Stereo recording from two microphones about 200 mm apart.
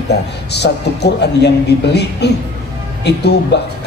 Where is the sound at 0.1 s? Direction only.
55° left (ahead or behind).